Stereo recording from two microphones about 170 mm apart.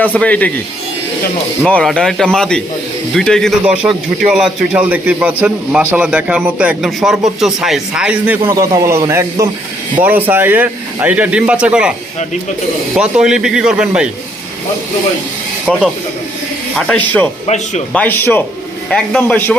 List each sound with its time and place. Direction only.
0.0 s speech: 10° left (ahead or behind)
1.6 s a man's voice: 5° left (ahead or behind)
8.4 s a man's voice: 20° right (ahead or behind)
13.0 s speech: 5° right (ahead or behind)
16.7 s speech: 10° left (ahead or behind)
17.4 s speech: 40° left (ahead or behind)
17.9 s speech: 10° left (ahead or behind)